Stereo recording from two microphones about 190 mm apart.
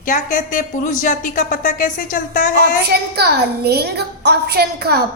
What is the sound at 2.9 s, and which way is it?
A woman's voice, 55° right (ahead or behind).